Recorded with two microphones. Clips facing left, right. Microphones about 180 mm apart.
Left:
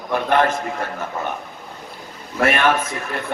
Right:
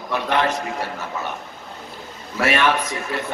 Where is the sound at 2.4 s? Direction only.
50° left (ahead or behind).